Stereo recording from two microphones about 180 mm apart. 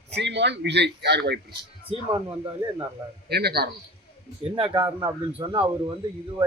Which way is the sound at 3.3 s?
60° right (ahead or behind).